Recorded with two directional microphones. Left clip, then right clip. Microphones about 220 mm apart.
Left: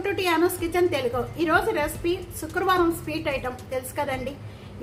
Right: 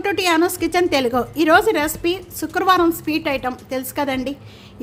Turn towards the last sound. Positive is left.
turn(degrees=-50)  # may be behind; listen again after turning